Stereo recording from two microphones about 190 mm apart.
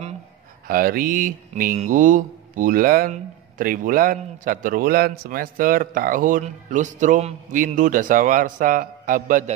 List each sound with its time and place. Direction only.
0.7 s speech: 50° right (ahead or behind)